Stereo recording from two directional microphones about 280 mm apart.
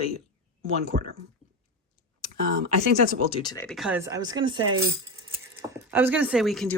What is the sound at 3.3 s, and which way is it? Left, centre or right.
Speech, centre.